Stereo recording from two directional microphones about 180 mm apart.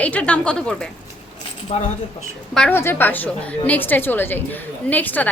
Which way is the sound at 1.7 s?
35° left (ahead or behind).